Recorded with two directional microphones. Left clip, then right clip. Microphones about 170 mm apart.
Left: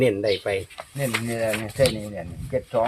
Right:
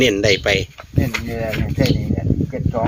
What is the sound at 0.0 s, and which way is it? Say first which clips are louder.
Speech: right 6 dB; 75° right (ahead or behind).